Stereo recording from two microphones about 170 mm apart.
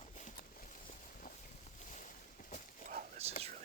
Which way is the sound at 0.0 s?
45° left (ahead or behind).